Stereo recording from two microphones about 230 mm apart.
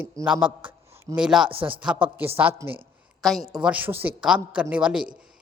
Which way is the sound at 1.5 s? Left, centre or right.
Right.